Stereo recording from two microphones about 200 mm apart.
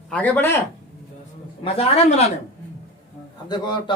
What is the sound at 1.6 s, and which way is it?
Speech, 30° left (ahead or behind).